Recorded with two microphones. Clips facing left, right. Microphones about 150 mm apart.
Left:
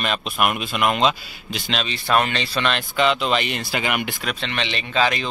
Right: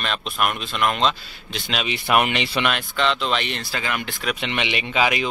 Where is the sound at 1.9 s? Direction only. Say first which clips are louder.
Right 1 dB; 15° right (ahead or behind).